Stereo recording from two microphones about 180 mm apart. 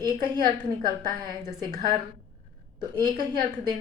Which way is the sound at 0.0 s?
20° right (ahead or behind).